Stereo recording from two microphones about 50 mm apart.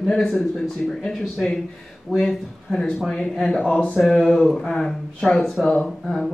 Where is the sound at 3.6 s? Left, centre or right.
Left.